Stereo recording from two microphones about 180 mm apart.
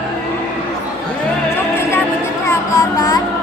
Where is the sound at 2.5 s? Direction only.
20° left (ahead or behind).